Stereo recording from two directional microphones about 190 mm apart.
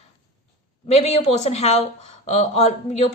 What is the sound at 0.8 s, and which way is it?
A woman's voice, 35° left (ahead or behind).